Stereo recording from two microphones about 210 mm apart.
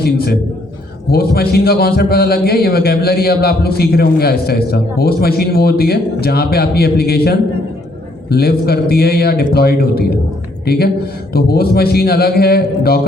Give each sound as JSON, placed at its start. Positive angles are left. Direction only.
{"t": 0.0, "sound": "a man's voice", "side_deg": 45}